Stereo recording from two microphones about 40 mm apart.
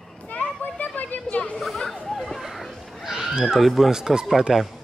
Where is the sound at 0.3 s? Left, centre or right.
Left.